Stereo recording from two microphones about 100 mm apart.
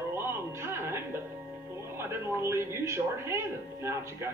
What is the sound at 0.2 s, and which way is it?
Music, 25° right (ahead or behind).